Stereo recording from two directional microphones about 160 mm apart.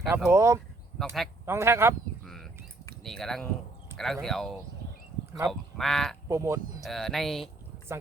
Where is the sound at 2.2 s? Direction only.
Centre (ahead or behind).